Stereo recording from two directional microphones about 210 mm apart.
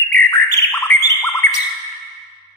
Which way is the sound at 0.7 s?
15° left (ahead or behind).